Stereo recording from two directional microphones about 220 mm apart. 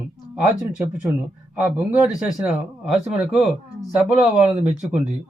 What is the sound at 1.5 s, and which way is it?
Speech, 5° right (ahead or behind).